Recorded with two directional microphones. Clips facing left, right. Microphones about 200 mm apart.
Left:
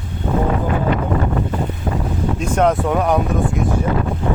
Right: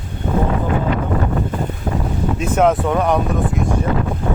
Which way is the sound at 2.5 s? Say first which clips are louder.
Right 1 dB; centre (ahead or behind).